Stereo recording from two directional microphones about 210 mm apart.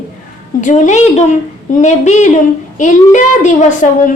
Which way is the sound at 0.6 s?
35° left (ahead or behind).